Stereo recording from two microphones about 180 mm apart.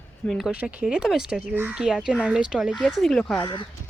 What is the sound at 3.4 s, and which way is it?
Speech, 25° left (ahead or behind).